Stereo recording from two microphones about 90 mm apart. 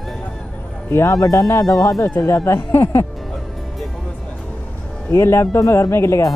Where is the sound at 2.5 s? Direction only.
30° left (ahead or behind).